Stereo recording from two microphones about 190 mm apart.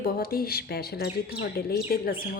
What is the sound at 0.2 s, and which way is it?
Speech, 50° left (ahead or behind).